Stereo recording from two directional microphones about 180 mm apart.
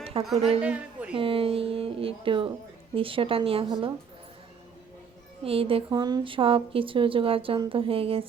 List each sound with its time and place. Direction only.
0.1 s speech: 30° right (ahead or behind)
0.6 s a sound: 5° right (ahead or behind)
1.1 s speech: 30° right (ahead or behind)
5.4 s speech: 30° right (ahead or behind)